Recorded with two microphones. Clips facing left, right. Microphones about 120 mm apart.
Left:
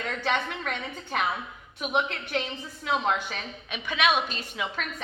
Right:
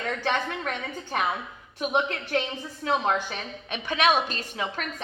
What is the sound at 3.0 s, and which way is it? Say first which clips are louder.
A woman's voice: right 1 dB; 35° right (ahead or behind).